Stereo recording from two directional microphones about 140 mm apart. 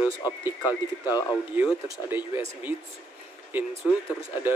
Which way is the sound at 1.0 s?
25° left (ahead or behind).